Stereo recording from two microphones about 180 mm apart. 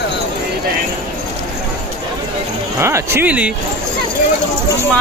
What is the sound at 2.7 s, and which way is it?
Speech, 15° right (ahead or behind).